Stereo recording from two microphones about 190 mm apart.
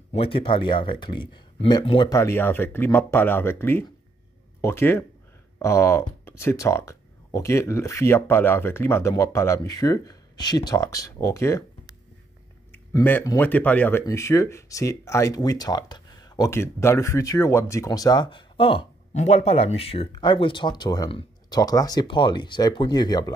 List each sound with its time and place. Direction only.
0.1 s speech: 30° left (ahead or behind)
12.7 s speech: 10° left (ahead or behind)